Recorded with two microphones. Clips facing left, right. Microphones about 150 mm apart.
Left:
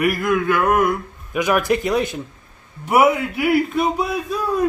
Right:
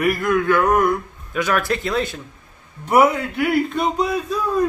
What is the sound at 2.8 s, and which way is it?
Speech, 5° left (ahead or behind).